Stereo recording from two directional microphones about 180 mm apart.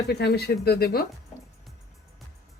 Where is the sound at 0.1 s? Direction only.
65° left (ahead or behind).